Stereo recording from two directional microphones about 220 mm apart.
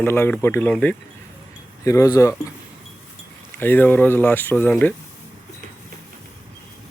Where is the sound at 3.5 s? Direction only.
10° left (ahead or behind).